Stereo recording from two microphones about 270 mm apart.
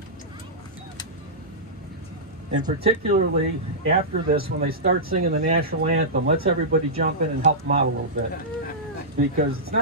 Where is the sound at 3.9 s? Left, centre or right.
Right.